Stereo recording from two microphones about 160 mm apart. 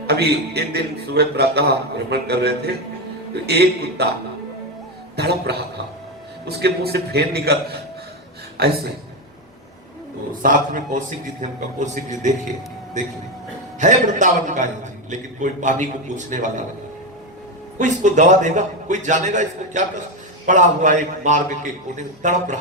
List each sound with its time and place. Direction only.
0.1 s a man's voice: 90° right
5.1 s a sound: 90° right
6.6 s a man's voice: 90° right
8.6 s a man's voice: 75° right (ahead or behind)
10.4 s a man's voice: 55° right (ahead or behind)
13.7 s a man's voice: 50° right (ahead or behind)
17.7 s a man's voice: 50° right (ahead or behind)